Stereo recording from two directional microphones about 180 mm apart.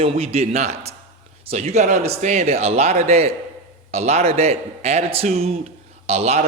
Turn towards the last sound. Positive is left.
turn(degrees=-35)  # may be behind; listen again after turning